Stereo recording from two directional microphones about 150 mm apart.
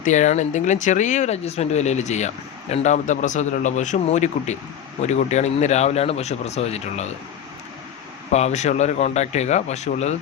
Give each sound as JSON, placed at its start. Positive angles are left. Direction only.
{"t": 0.0, "sound": "speech", "side_deg": 55}
{"t": 8.3, "sound": "speech", "side_deg": 50}